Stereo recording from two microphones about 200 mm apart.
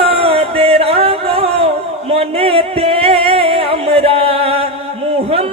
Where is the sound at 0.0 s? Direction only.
30° right (ahead or behind).